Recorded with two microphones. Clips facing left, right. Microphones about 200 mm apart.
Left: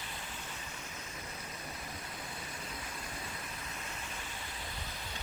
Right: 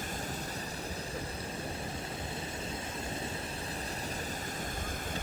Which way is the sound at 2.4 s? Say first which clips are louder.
Right 6 dB; 25° right (ahead or behind).